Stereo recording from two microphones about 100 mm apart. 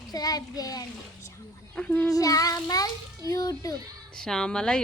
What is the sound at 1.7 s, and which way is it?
Speech, 10° left (ahead or behind).